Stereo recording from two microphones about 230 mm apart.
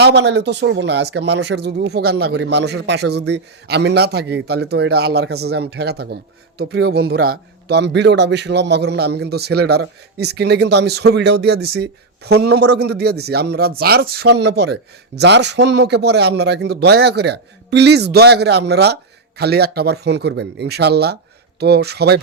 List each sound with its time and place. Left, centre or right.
0.0 s a man's voice: right